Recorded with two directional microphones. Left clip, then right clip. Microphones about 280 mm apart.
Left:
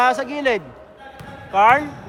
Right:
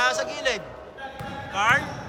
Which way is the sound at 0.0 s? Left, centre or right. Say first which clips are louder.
Left 6 dB; left.